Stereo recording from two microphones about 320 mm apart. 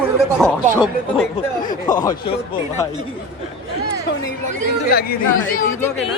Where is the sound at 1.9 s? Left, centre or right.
Centre.